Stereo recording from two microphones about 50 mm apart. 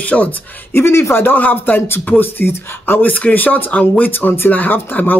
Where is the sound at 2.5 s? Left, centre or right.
Left.